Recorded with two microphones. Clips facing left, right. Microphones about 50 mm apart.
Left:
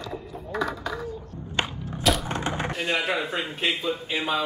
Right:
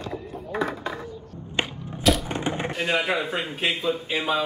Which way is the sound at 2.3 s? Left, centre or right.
Centre.